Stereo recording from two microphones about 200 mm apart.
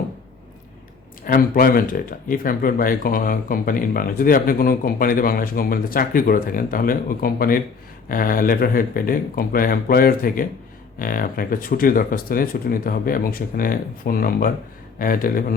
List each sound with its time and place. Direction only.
1.2 s speech: 45° left (ahead or behind)